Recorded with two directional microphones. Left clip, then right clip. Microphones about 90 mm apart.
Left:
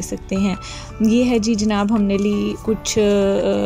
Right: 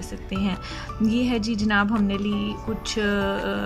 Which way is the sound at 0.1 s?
45° left (ahead or behind).